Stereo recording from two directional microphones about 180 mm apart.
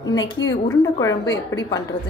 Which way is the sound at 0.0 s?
20° left (ahead or behind).